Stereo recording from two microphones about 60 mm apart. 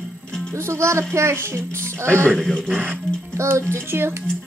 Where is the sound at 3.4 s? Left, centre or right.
Right.